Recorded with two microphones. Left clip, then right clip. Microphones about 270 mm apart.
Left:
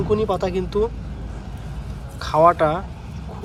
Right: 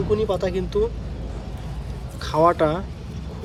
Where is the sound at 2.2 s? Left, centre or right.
Centre.